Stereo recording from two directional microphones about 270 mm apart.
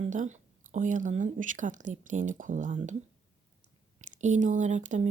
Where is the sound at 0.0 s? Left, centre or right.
Right.